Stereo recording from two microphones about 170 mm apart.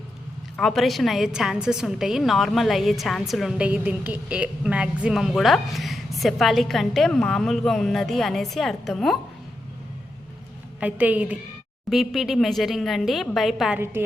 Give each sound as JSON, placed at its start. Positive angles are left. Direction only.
{"t": 0.5, "sound": "a woman's voice", "side_deg": 0}
{"t": 10.8, "sound": "a woman's voice", "side_deg": -10}
{"t": 13.7, "sound": "a woman's voice", "side_deg": -15}